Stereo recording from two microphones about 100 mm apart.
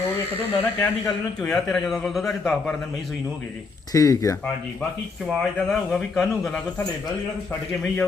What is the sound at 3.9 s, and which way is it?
Speech, 35° left (ahead or behind).